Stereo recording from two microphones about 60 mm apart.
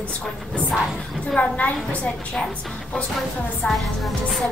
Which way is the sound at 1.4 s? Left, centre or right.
Centre.